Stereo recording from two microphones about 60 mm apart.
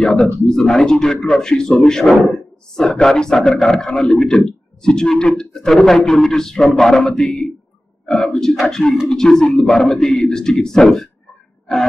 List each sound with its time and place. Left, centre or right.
0.0 s speech: centre